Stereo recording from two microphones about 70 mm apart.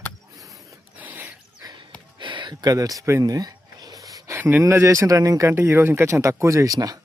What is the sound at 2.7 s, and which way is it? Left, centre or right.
Speech, right.